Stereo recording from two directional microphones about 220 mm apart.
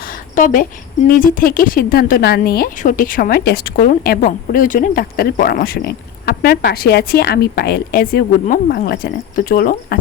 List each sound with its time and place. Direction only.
0.3 s a woman's voice: 35° left (ahead or behind)